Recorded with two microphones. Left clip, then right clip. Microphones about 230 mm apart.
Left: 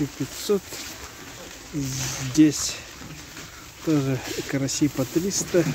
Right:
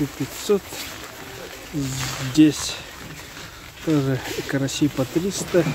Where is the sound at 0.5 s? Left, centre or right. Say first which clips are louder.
Right 3 dB; centre.